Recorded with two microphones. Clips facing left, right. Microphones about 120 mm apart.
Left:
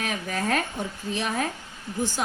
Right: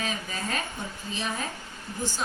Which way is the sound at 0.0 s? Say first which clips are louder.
Left 4 dB; 70° left (ahead or behind).